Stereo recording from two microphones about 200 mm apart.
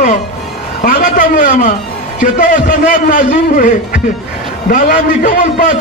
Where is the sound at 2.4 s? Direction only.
40° left (ahead or behind).